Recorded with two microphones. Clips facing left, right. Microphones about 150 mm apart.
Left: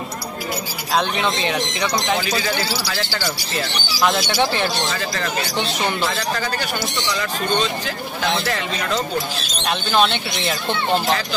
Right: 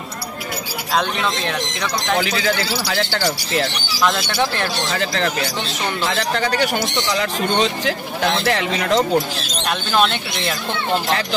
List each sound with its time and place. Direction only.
1.4 s speech: centre (ahead or behind)
2.1 s speech: 60° right (ahead or behind)
4.0 s speech: 5° left (ahead or behind)
4.9 s a man's voice: 60° right (ahead or behind)
9.7 s speech: centre (ahead or behind)